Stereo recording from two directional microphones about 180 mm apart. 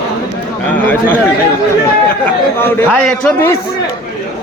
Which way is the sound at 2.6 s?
10° left (ahead or behind).